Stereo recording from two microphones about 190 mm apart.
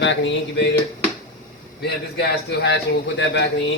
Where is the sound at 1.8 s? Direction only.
65° left (ahead or behind).